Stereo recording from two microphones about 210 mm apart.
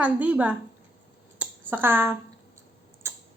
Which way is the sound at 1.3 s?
10° right (ahead or behind).